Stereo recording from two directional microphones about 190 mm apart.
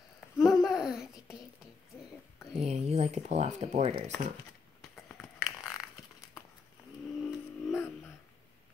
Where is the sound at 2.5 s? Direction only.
35° right (ahead or behind).